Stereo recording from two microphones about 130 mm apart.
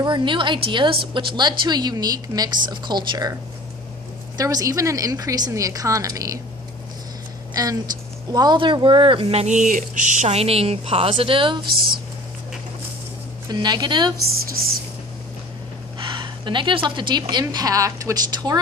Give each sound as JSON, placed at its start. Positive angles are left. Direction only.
{"t": 0.0, "sound": "a woman's voice", "side_deg": -40}
{"t": 4.4, "sound": "a woman's voice", "side_deg": -25}
{"t": 7.5, "sound": "speech", "side_deg": -30}
{"t": 13.5, "sound": "a woman's voice", "side_deg": -30}
{"t": 16.0, "sound": "a woman's voice", "side_deg": -35}